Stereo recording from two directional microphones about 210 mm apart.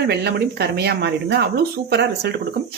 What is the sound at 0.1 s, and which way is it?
Speech, 50° right (ahead or behind).